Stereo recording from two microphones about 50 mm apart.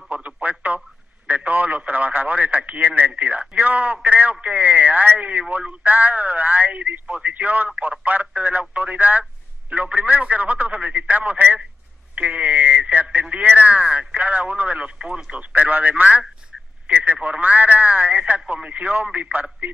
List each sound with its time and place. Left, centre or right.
0.1 s radio: right
3.2 s a man's voice: right
5.6 s telephone: right
7.8 s a sound: right
9.7 s speech: right